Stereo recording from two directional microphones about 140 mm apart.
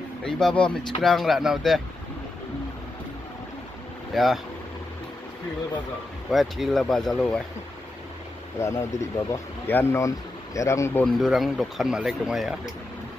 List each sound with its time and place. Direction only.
0.2 s speech: 5° left (ahead or behind)
4.1 s speech: centre (ahead or behind)
6.3 s speech: centre (ahead or behind)
8.5 s speech: 20° left (ahead or behind)
11.1 s speech: centre (ahead or behind)